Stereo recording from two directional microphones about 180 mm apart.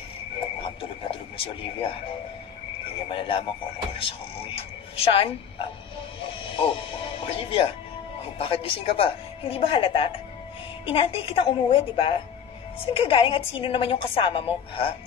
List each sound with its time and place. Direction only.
0.7 s radio: 30° left (ahead or behind)
3.1 s a woman's voice: 30° left (ahead or behind)
6.4 s music: 30° left (ahead or behind)
8.4 s a woman's voice: 30° left (ahead or behind)